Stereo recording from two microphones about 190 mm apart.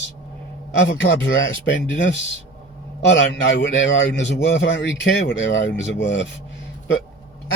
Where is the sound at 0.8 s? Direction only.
65° left (ahead or behind).